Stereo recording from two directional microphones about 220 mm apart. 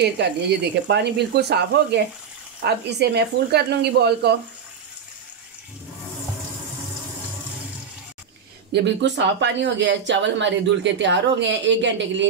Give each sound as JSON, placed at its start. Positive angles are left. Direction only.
{"t": 0.5, "sound": "speech", "side_deg": -50}
{"t": 8.7, "sound": "speech", "side_deg": -50}